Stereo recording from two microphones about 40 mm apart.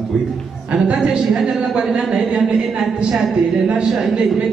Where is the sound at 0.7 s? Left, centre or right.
Right.